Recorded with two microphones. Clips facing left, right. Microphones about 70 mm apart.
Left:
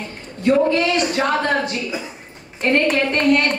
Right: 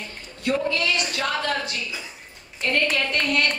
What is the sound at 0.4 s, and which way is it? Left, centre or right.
Speech, left.